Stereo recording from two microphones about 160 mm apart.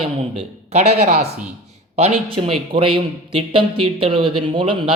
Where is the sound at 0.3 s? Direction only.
45° right (ahead or behind).